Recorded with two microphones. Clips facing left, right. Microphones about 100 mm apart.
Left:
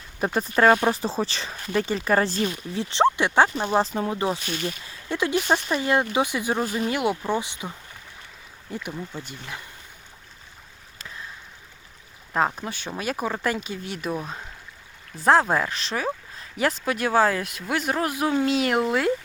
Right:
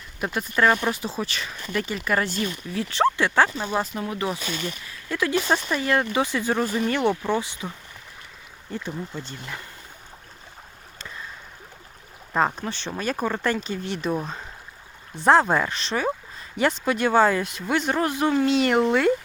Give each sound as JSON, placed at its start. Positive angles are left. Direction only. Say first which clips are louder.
{"t": 0.2, "sound": "speech", "louder": "left 2 dB", "side_deg": 35}
{"t": 2.9, "sound": "speech", "louder": "left 1 dB", "side_deg": 20}
{"t": 3.6, "sound": "speech", "louder": "left 4 dB", "side_deg": 35}
{"t": 8.9, "sound": "speech", "louder": "right 2 dB", "side_deg": 0}
{"t": 10.9, "sound": "a sound", "louder": "right 1 dB", "side_deg": 0}
{"t": 12.3, "sound": "speech", "louder": "right 1 dB", "side_deg": 0}